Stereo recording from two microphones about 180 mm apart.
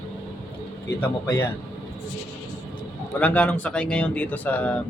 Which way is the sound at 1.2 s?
15° left (ahead or behind).